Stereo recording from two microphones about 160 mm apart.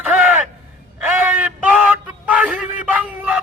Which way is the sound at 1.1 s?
10° right (ahead or behind).